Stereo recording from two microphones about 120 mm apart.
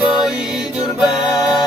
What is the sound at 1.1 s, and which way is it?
Music, 5° right (ahead or behind).